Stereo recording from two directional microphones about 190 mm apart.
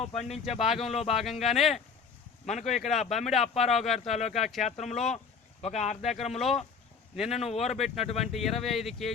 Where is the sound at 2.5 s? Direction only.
35° left (ahead or behind).